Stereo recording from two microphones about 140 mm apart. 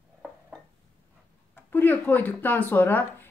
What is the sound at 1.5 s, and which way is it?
Speech, 15° left (ahead or behind).